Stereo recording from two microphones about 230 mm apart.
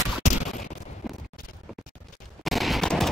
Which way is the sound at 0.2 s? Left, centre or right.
Left.